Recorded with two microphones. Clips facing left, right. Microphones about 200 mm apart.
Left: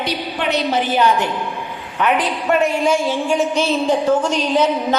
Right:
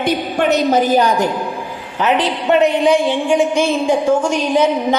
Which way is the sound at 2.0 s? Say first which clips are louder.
Right 2 dB; 25° right (ahead or behind).